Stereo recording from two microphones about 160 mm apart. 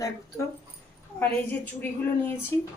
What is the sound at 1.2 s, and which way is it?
Speech, 10° left (ahead or behind).